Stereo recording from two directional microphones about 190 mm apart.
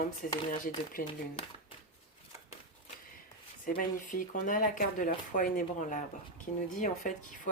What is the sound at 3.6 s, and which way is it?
Speech, 45° left (ahead or behind).